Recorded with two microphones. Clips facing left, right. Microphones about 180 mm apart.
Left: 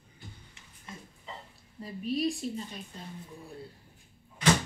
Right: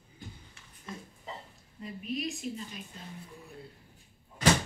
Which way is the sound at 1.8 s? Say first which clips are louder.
Left 5 dB; 35° left (ahead or behind).